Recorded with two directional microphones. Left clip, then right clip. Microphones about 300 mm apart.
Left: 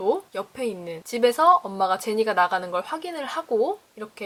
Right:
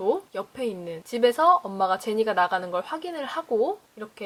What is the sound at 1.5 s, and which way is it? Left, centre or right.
Speech, centre.